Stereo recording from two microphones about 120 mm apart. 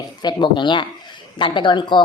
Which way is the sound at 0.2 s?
40° left (ahead or behind).